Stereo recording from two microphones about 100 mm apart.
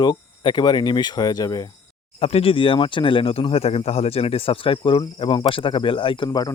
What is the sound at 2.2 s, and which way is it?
Speech, 85° left.